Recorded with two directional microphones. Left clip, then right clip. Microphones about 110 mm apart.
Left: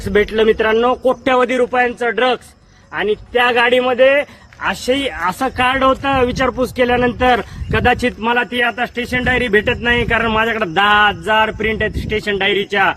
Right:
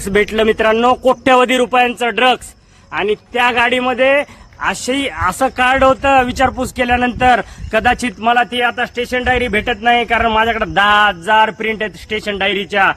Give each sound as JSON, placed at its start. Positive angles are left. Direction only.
{"t": 0.0, "sound": "a man's voice", "side_deg": -55}
{"t": 2.9, "sound": "speech", "side_deg": -40}
{"t": 9.1, "sound": "speech", "side_deg": -30}